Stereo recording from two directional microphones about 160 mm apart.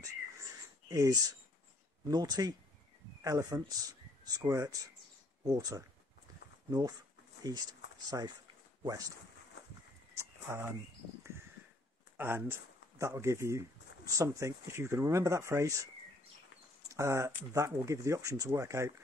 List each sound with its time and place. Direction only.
0.8 s speech: 20° right (ahead or behind)
7.5 s speech: 20° right (ahead or behind)
10.1 s a sound: 15° right (ahead or behind)
12.2 s speech: 15° right (ahead or behind)
16.9 s speech: 15° right (ahead or behind)